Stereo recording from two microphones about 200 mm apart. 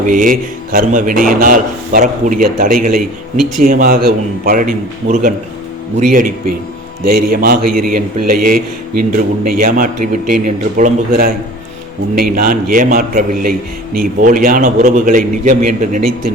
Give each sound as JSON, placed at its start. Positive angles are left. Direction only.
{"t": 0.1, "sound": "a man's voice", "side_deg": -45}